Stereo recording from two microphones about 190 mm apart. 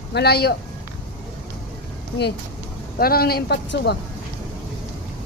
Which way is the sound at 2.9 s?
50° left (ahead or behind).